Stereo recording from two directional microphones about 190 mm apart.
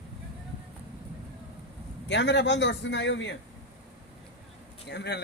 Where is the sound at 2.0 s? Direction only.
65° left (ahead or behind).